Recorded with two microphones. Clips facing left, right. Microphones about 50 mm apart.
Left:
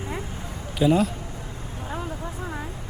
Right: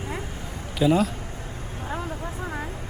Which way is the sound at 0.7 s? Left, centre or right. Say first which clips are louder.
Even; centre.